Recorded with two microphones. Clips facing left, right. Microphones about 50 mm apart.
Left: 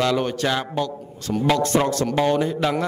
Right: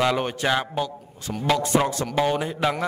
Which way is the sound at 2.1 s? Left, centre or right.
Centre.